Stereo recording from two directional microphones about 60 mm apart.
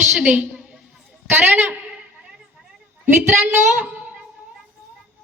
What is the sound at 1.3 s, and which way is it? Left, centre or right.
Speech, right.